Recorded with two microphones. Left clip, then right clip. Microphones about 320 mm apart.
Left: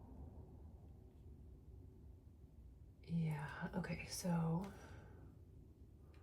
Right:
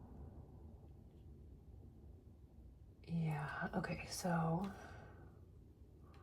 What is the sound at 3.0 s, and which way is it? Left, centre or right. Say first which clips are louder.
Whispering: right 3 dB; centre.